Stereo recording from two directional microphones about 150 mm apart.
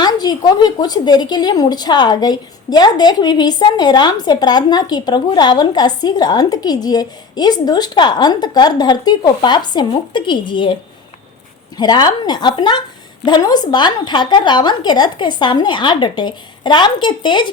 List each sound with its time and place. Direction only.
0.0 s a woman's voice: 25° left (ahead or behind)
11.8 s a woman's voice: 30° left (ahead or behind)